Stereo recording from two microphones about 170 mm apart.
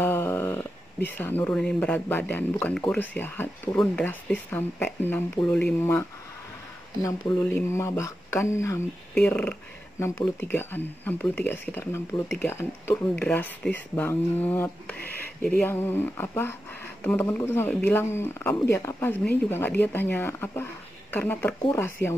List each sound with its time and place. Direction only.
0.0 s speech: 15° left (ahead or behind)
7.2 s speech: 5° left (ahead or behind)